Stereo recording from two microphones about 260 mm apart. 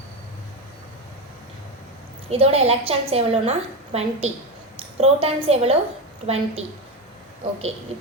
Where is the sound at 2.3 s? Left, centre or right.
Right.